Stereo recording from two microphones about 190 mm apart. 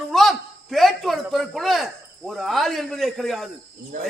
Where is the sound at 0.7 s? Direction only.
Centre (ahead or behind).